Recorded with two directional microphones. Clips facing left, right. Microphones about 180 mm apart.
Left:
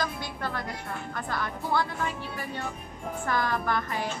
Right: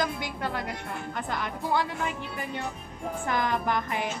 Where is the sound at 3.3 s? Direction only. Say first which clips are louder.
Even; 15° right (ahead or behind).